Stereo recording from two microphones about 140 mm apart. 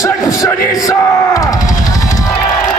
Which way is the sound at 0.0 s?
25° left (ahead or behind).